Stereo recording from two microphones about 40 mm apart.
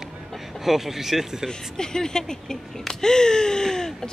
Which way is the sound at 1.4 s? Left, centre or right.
Centre.